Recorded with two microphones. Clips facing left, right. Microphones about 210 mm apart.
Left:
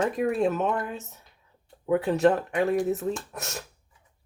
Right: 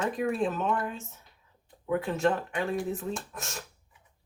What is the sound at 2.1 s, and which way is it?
Speech, 35° left (ahead or behind).